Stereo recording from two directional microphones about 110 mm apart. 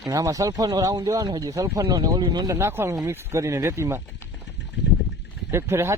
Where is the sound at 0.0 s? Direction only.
35° right (ahead or behind).